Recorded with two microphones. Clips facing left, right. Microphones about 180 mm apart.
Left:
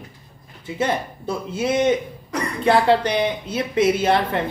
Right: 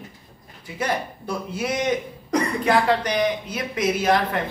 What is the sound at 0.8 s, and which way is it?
Speech, 25° left (ahead or behind).